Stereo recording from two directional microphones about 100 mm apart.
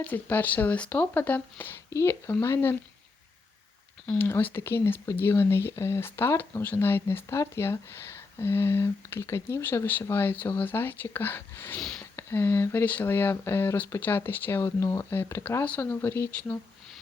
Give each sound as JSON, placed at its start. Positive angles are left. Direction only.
{"t": 0.0, "sound": "speech", "side_deg": 15}
{"t": 4.0, "sound": "speech", "side_deg": 10}
{"t": 11.8, "sound": "speech", "side_deg": 5}
{"t": 12.1, "sound": "speech", "side_deg": 25}
{"t": 15.6, "sound": "speech", "side_deg": 15}
{"t": 16.3, "sound": "speech", "side_deg": 15}